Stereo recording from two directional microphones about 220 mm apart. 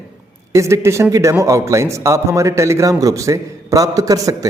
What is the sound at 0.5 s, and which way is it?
A man's voice, 15° right (ahead or behind).